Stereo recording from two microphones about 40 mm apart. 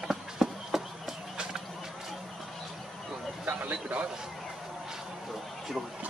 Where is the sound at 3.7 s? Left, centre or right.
Right.